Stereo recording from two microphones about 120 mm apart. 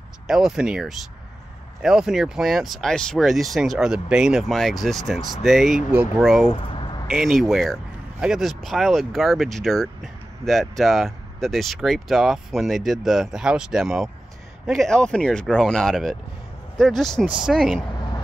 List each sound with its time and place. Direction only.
0.3 s speech: 5° right (ahead or behind)
5.9 s speech: 15° right (ahead or behind)
6.2 s speech: centre (ahead or behind)
6.7 s a sound: 40° left (ahead or behind)
7.1 s speech: centre (ahead or behind)